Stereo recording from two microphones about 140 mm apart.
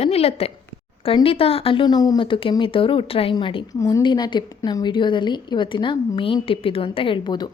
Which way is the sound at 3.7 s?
25° left (ahead or behind).